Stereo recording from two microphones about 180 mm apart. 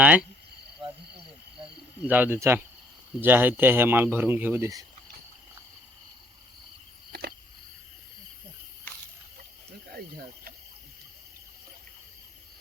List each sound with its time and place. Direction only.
0.0 s speech: 5° right (ahead or behind)
2.0 s speech: 10° right (ahead or behind)
7.1 s cricket: 65° right (ahead or behind)
9.9 s a sound: 55° right (ahead or behind)